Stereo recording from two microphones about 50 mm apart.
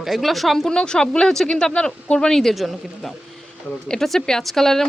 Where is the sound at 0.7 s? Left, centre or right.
Centre.